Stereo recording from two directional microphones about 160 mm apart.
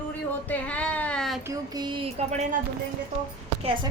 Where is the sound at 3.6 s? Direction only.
35° right (ahead or behind).